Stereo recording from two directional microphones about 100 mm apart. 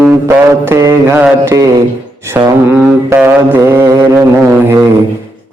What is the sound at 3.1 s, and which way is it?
Mantra, 20° right (ahead or behind).